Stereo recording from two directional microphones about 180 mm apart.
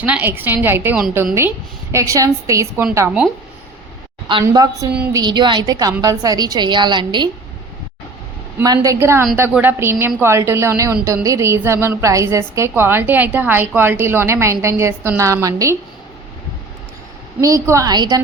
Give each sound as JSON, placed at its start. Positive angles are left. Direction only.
{"t": 0.0, "sound": "a woman's voice", "side_deg": -10}
{"t": 4.4, "sound": "a woman's voice", "side_deg": -20}
{"t": 8.5, "sound": "a woman's voice", "side_deg": -20}
{"t": 17.4, "sound": "a woman's voice", "side_deg": -20}